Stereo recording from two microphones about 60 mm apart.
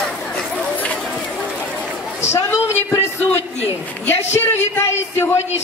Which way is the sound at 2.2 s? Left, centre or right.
Left.